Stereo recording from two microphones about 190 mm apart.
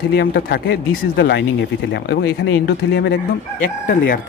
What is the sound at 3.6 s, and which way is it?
Speech, 50° left (ahead or behind).